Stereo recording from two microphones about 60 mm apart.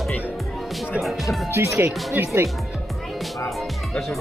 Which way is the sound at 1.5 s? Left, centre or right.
Right.